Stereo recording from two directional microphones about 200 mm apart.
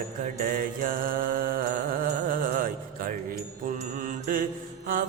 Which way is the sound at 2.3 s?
45° right (ahead or behind).